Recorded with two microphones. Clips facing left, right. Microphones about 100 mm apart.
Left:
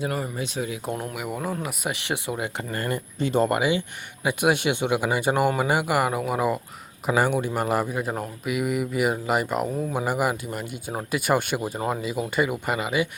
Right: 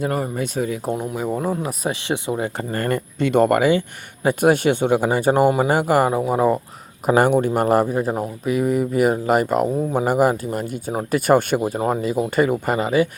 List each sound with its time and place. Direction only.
0.0 s speech: 45° right (ahead or behind)
1.1 s speech: 30° right (ahead or behind)
2.7 s speech: 50° right (ahead or behind)
3.2 s speech: 60° right (ahead or behind); by 6.1 s 40° right (ahead or behind)
6.1 s speech: 30° right (ahead or behind)
7.1 s speech: 50° right (ahead or behind)